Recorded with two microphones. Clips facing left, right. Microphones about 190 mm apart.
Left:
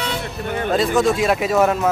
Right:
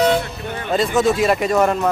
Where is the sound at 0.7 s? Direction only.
Centre (ahead or behind).